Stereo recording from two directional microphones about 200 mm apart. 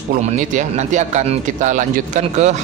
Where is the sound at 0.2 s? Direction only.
35° right (ahead or behind).